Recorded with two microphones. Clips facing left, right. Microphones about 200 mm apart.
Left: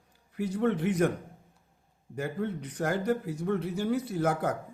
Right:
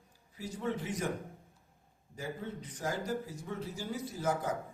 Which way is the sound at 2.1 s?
65° left (ahead or behind).